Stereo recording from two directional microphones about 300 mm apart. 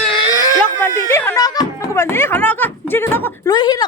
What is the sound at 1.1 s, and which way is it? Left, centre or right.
Speech, centre.